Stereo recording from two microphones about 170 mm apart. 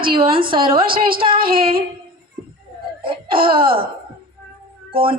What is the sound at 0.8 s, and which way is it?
Speech, 60° right (ahead or behind).